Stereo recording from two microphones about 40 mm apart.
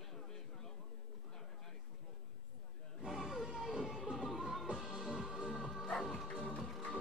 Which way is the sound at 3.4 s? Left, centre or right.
Centre.